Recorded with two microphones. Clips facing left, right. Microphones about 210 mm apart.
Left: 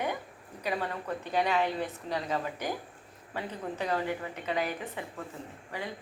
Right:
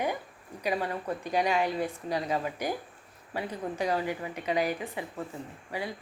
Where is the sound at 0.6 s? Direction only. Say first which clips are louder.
Right 3 dB; 10° right (ahead or behind).